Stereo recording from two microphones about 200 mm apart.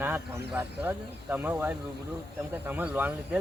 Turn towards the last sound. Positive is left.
turn(degrees=-10)  # may be behind; listen again after turning